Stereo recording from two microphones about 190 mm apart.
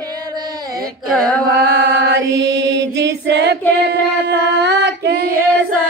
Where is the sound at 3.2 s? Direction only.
65° right (ahead or behind).